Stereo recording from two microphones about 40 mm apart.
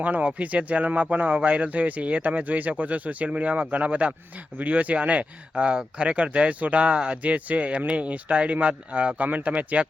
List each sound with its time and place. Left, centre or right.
0.0 s speech: right
7.2 s speech: right